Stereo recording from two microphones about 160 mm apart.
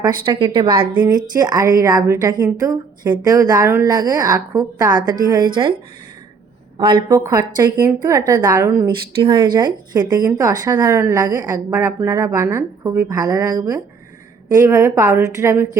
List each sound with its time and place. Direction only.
0.0 s a woman's voice: 30° right (ahead or behind)
6.7 s a woman's voice: 30° right (ahead or behind)
9.2 s a woman's voice: 30° right (ahead or behind)